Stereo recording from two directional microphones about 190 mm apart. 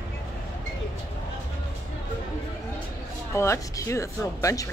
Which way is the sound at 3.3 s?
15° left (ahead or behind).